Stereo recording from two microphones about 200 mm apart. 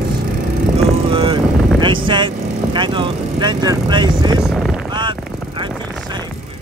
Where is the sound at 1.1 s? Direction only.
25° right (ahead or behind).